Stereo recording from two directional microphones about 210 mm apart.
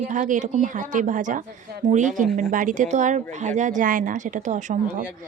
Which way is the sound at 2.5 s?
40° right (ahead or behind).